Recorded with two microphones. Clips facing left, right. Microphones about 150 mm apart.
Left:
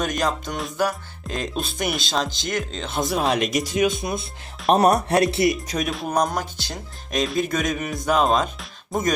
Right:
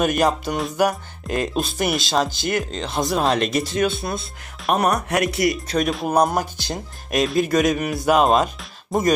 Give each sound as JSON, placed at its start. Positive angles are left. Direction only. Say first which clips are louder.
{"t": 0.0, "sound": "speech", "louder": "right 5 dB", "side_deg": -10}
{"t": 4.7, "sound": "speech", "louder": "left 3 dB", "side_deg": 35}
{"t": 5.6, "sound": "speech", "louder": "right 4 dB", "side_deg": 5}
{"t": 6.1, "sound": "speech", "louder": "right 4 dB", "side_deg": -10}
{"t": 7.2, "sound": "speech", "louder": "right 4 dB", "side_deg": 0}